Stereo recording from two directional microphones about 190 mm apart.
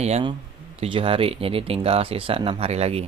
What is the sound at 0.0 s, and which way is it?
Speech, 35° right (ahead or behind).